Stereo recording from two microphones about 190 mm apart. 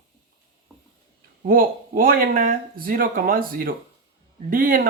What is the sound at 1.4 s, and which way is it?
Speech, 45° right (ahead or behind).